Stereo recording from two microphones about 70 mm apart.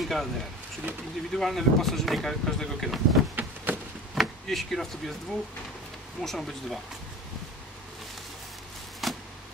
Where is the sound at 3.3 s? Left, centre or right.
Right.